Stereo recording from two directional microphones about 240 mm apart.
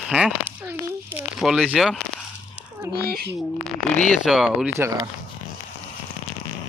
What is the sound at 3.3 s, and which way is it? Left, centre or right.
Speech, centre.